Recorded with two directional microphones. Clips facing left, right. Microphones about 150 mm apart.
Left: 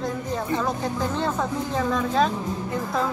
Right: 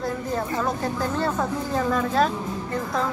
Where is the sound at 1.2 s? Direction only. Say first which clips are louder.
Right 1 dB; 5° right (ahead or behind).